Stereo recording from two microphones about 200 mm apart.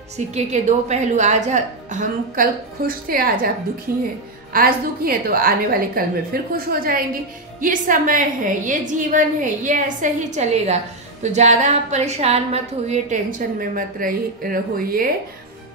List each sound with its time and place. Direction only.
0.3 s a woman's voice: 35° right (ahead or behind)
4.5 s a woman's voice: 45° right (ahead or behind)